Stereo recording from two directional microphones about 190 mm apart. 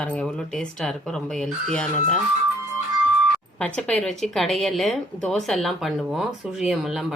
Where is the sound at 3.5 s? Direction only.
5° left (ahead or behind).